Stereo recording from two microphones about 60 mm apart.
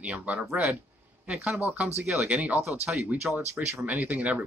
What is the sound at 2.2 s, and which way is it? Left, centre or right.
Speech, right.